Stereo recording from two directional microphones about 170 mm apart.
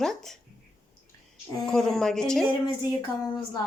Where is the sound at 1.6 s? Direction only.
5° left (ahead or behind).